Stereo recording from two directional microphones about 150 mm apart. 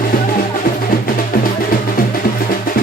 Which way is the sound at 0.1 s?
70° left (ahead or behind).